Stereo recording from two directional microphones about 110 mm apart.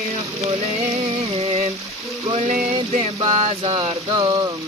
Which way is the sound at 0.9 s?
65° right (ahead or behind).